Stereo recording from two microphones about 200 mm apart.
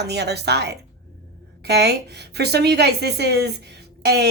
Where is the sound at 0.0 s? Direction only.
55° right (ahead or behind).